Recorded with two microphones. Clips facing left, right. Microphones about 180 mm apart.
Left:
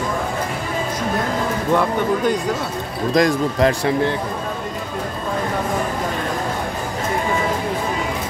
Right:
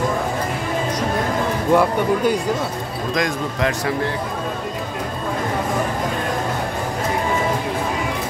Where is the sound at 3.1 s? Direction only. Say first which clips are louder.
Left 7 dB; 35° left (ahead or behind).